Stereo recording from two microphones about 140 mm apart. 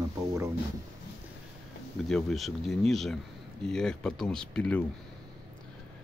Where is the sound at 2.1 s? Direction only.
Centre (ahead or behind).